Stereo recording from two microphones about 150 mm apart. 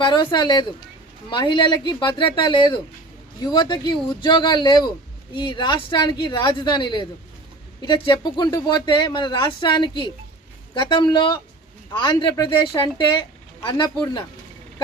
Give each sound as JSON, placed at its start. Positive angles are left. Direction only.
{"t": 0.0, "sound": "speech", "side_deg": 30}